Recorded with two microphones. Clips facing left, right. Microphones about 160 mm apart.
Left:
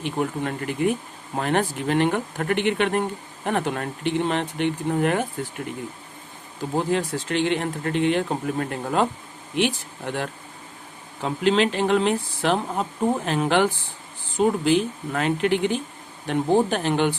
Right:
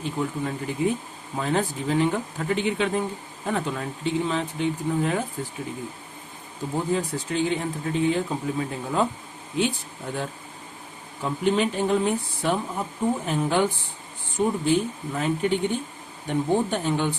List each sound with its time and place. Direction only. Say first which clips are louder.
0.0 s speech: left 2 dB; 70° left (ahead or behind)
6.7 s speech: left 2 dB; 90° left
11.2 s insect: left 2 dB; 85° left
13.2 s speech: left 3 dB; 90° left